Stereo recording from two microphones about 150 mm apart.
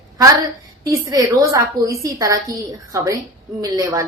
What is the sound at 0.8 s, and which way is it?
A woman's voice, 25° right (ahead or behind).